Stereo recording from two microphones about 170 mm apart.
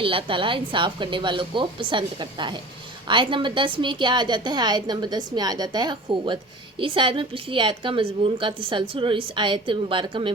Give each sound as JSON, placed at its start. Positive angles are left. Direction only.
{"t": 0.0, "sound": "a woman's voice", "side_deg": -30}